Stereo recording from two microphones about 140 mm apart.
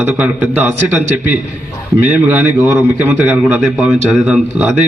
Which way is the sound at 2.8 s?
15° right (ahead or behind).